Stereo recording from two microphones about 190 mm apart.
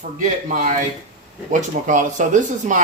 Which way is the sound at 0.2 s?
40° right (ahead or behind).